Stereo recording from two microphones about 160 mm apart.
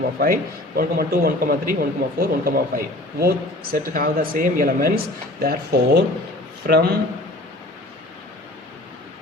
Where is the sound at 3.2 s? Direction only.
70° right (ahead or behind).